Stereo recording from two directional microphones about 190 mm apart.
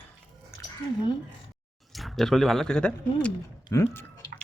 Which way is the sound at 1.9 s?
Centre (ahead or behind).